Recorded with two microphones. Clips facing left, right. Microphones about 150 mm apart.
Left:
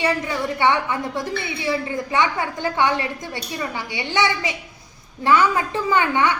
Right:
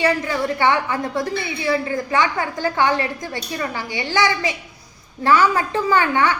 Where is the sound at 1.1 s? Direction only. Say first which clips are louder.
Right 3 dB; 40° right (ahead or behind).